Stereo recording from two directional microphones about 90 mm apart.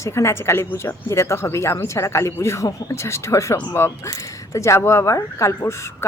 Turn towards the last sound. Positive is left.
turn(degrees=30)  # may be behind; listen again after turning